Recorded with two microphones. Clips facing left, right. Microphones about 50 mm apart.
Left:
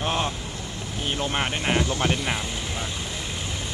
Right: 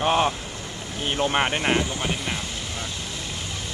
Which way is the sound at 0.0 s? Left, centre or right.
Centre.